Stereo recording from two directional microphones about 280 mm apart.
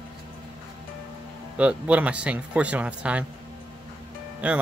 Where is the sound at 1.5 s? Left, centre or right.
Centre.